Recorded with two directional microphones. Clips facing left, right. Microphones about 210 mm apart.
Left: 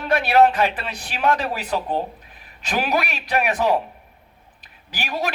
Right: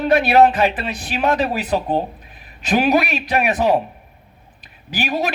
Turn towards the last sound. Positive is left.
turn(degrees=-20)  # may be behind; listen again after turning